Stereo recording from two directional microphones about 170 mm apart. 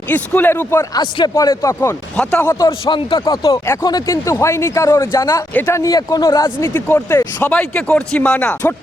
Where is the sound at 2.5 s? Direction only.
25° left (ahead or behind); by 8.7 s 5° left (ahead or behind).